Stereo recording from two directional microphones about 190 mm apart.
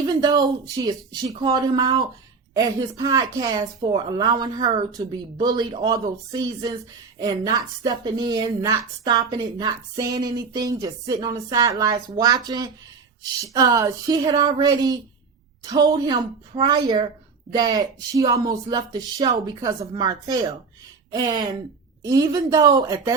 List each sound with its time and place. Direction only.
0.0 s a woman's voice: 20° right (ahead or behind)